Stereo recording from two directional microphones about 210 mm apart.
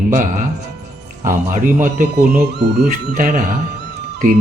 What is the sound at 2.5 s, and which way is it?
Speech, 55° right (ahead or behind).